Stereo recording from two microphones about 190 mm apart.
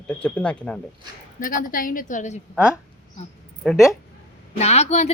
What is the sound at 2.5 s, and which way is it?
Speech, 5° right (ahead or behind).